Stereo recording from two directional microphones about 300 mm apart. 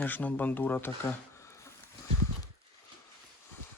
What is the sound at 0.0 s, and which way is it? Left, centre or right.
Speech, centre.